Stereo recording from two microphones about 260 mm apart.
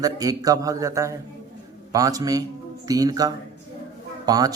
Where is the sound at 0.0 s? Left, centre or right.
Centre.